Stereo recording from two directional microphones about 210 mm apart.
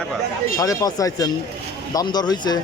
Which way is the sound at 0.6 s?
15° left (ahead or behind).